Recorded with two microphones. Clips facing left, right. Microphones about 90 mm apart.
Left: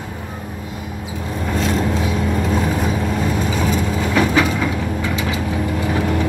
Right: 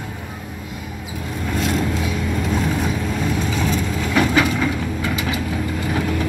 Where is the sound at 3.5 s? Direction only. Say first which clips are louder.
Left 2 dB; 10° left (ahead or behind).